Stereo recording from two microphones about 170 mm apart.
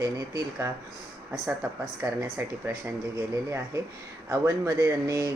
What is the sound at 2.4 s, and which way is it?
Speech, 15° right (ahead or behind).